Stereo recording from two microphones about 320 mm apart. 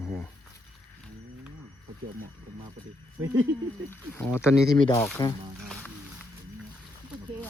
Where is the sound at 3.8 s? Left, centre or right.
Centre.